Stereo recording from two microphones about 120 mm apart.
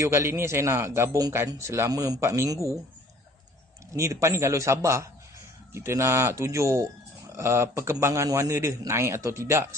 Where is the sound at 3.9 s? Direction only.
25° right (ahead or behind).